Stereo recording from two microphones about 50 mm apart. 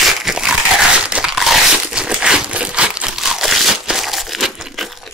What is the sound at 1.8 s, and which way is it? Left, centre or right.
Crumpling, centre.